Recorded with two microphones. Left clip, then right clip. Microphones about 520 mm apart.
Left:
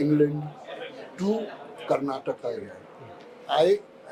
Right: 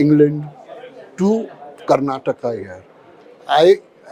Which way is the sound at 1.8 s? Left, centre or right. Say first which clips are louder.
Right 10 dB; right.